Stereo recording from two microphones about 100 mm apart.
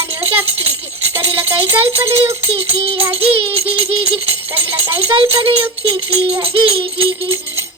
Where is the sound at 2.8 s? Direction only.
70° right (ahead or behind).